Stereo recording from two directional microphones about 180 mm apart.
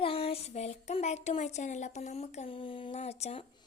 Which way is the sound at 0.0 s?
30° left (ahead or behind).